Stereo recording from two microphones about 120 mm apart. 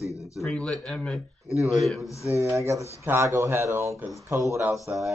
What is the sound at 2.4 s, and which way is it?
Speech, 25° right (ahead or behind).